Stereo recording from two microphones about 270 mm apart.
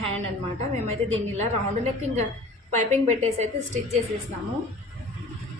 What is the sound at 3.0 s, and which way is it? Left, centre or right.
Speech, right.